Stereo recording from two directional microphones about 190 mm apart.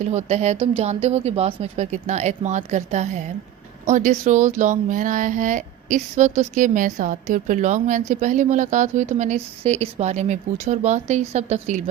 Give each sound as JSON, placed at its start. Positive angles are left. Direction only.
{"t": 0.0, "sound": "a woman's voice", "side_deg": -35}